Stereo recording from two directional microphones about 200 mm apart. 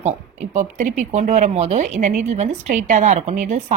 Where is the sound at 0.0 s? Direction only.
35° right (ahead or behind).